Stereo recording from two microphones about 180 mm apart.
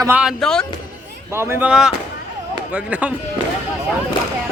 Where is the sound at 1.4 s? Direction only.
10° right (ahead or behind).